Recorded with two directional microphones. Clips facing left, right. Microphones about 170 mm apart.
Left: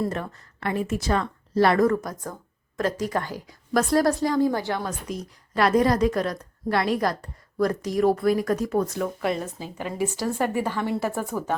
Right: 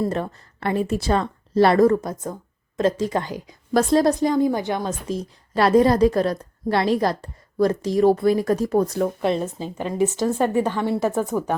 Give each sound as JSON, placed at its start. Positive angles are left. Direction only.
{"t": 0.0, "sound": "a woman's voice", "side_deg": -30}